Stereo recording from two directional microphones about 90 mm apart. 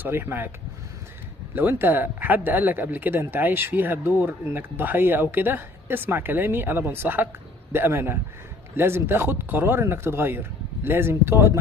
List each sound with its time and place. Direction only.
0.0 s speech: 25° right (ahead or behind)
1.5 s speech: 25° right (ahead or behind)